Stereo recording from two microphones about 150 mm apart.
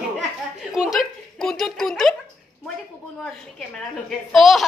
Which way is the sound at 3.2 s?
5° left (ahead or behind).